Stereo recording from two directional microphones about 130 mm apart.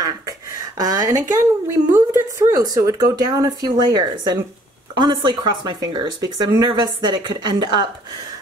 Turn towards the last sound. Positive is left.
turn(degrees=-35)  # may be behind; listen again after turning